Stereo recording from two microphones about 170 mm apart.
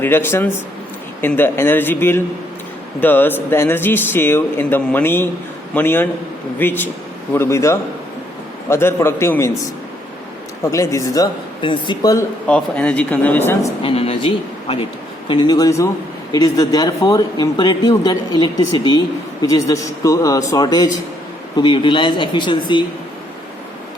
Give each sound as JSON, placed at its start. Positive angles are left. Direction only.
{"t": 0.0, "sound": "a man's voice", "side_deg": 15}
{"t": 10.7, "sound": "speech", "side_deg": 20}
{"t": 12.5, "sound": "a man's voice", "side_deg": 5}
{"t": 13.8, "sound": "speech", "side_deg": 35}